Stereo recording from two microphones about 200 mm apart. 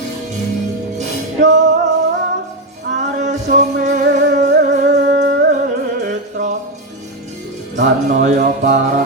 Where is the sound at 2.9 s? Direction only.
35° right (ahead or behind).